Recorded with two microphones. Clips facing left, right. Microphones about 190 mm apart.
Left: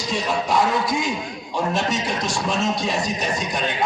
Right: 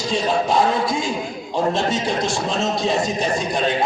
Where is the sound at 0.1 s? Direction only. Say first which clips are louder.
Right 3 dB; 25° right (ahead or behind).